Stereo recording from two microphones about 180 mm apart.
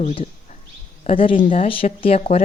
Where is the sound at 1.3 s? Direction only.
50° left (ahead or behind).